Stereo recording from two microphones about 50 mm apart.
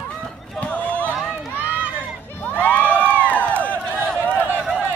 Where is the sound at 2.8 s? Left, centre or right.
Right.